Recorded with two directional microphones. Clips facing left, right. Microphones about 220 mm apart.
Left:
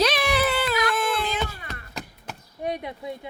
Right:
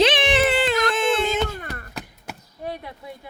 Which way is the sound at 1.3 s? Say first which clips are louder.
Right 5 dB; 50° right (ahead or behind).